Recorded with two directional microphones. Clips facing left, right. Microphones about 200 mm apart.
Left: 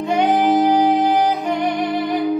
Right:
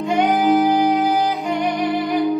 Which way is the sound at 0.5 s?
20° left (ahead or behind).